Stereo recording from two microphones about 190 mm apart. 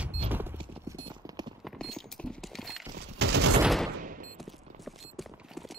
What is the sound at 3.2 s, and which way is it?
Fusillade, 60° right (ahead or behind).